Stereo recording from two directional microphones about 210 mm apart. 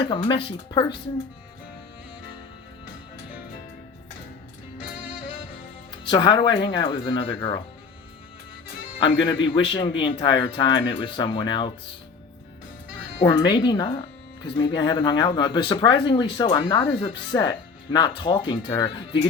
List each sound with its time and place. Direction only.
0.0 s speech: 25° left (ahead or behind)
6.1 s speech: 20° left (ahead or behind)
9.0 s speech: 25° left (ahead or behind)
13.2 s speech: 20° left (ahead or behind)